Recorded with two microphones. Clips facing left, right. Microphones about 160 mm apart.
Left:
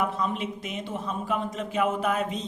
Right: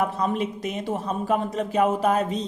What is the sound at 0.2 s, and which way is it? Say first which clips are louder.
A man's voice: right 4 dB; 40° right (ahead or behind).